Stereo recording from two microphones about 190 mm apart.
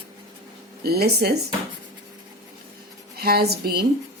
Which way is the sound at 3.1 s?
55° right (ahead or behind).